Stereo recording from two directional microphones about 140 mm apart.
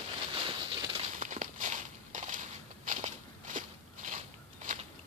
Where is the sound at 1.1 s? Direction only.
65° right (ahead or behind).